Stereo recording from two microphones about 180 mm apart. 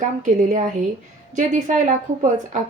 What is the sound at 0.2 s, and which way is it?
A woman's voice, 45° right (ahead or behind).